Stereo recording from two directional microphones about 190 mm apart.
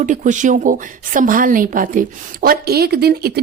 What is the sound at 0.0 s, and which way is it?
A woman's voice, 40° right (ahead or behind).